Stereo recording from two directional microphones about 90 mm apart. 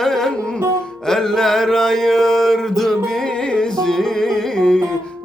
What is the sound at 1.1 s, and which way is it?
Mantra, 5° left (ahead or behind).